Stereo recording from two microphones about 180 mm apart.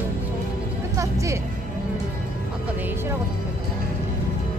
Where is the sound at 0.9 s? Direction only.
15° right (ahead or behind).